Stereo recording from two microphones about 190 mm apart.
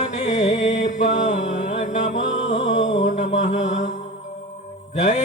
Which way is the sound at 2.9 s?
40° left (ahead or behind).